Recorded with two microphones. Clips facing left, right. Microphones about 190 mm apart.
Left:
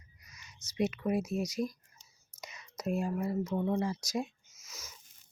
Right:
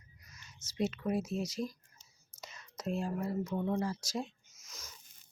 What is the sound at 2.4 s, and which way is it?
Whispering, 10° left (ahead or behind).